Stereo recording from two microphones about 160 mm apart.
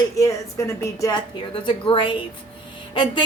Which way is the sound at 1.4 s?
35° left (ahead or behind).